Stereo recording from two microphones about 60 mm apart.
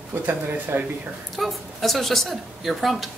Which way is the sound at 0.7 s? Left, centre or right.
Right.